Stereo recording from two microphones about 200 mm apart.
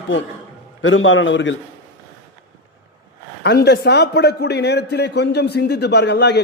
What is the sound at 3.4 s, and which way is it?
A man's voice, 55° left (ahead or behind).